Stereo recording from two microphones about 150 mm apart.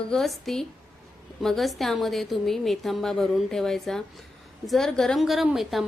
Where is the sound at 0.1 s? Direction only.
Centre (ahead or behind).